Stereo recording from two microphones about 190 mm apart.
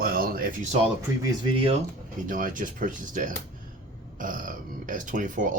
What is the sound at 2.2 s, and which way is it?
Speech, 45° right (ahead or behind).